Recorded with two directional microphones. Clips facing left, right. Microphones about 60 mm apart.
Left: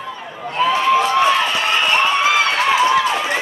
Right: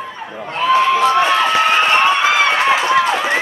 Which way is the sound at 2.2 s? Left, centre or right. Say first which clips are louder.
Right 2 dB; right.